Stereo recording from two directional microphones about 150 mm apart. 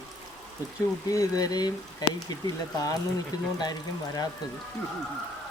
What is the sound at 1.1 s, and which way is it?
Speech, 25° left (ahead or behind).